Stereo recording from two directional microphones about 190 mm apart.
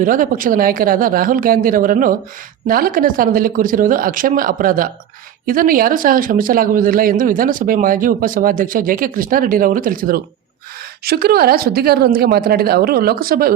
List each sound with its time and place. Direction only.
0.0 s speech: 45° right (ahead or behind)